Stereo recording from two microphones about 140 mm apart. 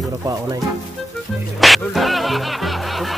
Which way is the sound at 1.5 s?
Centre (ahead or behind).